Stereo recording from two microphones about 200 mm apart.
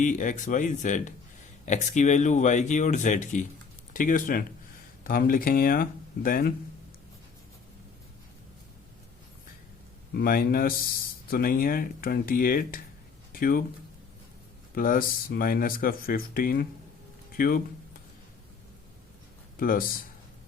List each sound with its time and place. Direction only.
0.0 s speech: 40° left (ahead or behind)
10.2 s speech: 45° left (ahead or behind)
14.8 s speech: 45° left (ahead or behind)
19.5 s speech: 45° left (ahead or behind)